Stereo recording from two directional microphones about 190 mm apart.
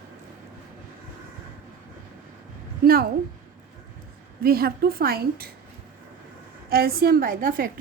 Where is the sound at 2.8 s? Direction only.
55° right (ahead or behind).